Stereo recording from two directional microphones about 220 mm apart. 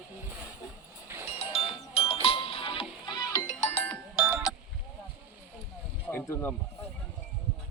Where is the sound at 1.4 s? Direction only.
25° left (ahead or behind).